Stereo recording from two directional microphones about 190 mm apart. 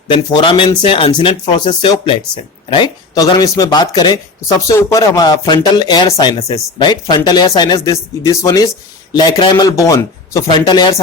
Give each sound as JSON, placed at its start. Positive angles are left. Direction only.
{"t": 0.1, "sound": "speech", "side_deg": 25}